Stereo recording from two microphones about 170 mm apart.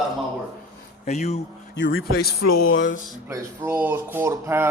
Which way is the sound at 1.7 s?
90° left.